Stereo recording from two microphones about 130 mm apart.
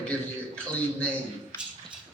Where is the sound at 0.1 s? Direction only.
10° left (ahead or behind).